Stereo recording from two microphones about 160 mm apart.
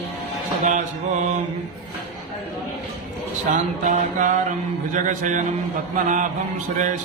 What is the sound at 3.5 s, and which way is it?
Mantra, 50° right (ahead or behind).